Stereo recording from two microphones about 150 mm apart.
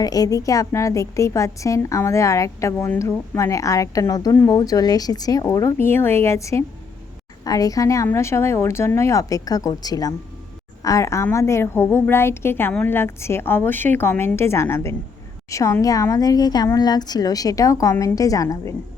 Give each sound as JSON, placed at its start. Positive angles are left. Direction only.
{"t": 0.0, "sound": "a woman's voice", "side_deg": 25}